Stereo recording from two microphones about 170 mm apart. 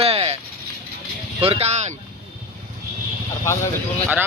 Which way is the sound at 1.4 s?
35° right (ahead or behind).